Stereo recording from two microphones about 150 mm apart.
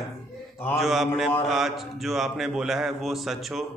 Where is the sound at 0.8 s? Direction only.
Centre (ahead or behind).